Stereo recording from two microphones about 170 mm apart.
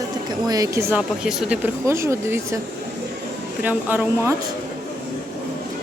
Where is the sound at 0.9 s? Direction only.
5° right (ahead or behind).